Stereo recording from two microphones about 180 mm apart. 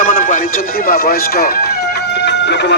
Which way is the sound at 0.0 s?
50° left (ahead or behind).